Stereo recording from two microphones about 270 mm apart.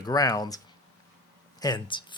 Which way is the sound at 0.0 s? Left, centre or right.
Centre.